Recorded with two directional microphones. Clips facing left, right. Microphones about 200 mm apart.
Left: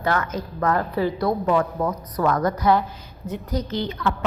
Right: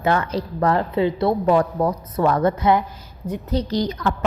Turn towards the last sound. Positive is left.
turn(degrees=-40)  # may be behind; listen again after turning